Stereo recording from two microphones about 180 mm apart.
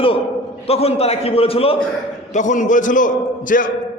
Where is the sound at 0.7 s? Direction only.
35° left (ahead or behind).